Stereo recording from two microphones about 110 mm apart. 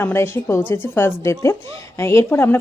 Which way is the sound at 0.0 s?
20° left (ahead or behind).